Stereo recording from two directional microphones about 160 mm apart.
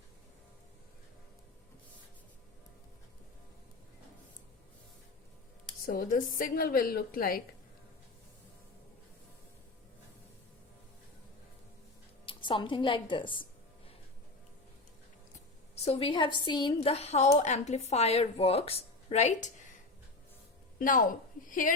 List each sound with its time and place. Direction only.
5.8 s a woman's voice: 60° left (ahead or behind)
12.2 s a woman's voice: 30° left (ahead or behind)
15.7 s a woman's voice: 40° left (ahead or behind)
20.7 s a woman's voice: 60° left (ahead or behind)